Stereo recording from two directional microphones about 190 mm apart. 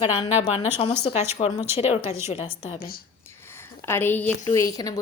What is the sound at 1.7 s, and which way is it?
A woman's voice, 30° left (ahead or behind).